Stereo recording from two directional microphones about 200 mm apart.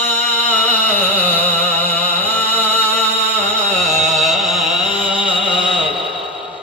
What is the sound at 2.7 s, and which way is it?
Music, 30° right (ahead or behind).